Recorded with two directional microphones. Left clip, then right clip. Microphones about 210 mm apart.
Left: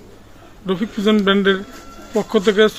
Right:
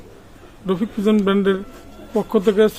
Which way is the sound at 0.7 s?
5° right (ahead or behind).